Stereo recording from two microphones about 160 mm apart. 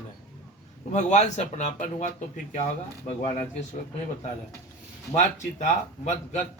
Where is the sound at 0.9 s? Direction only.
45° left (ahead or behind).